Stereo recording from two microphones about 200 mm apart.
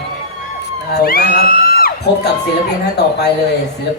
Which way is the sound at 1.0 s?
50° left (ahead or behind).